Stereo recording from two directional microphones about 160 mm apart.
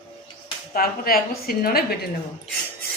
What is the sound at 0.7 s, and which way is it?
A woman's voice, 70° left (ahead or behind).